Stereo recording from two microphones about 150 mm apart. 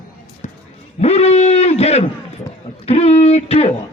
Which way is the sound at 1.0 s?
45° left (ahead or behind).